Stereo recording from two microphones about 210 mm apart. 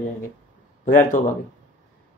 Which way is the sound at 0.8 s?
40° left (ahead or behind).